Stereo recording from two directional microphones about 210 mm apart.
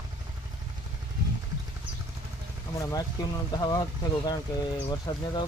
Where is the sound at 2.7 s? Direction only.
15° left (ahead or behind).